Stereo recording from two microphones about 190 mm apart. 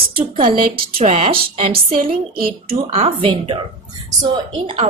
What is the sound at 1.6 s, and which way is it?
Speech, 30° right (ahead or behind).